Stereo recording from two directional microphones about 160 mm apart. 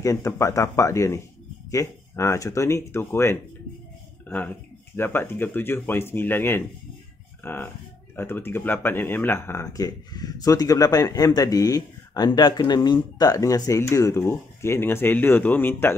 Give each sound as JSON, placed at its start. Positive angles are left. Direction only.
{"t": 0.0, "sound": "speech", "side_deg": 20}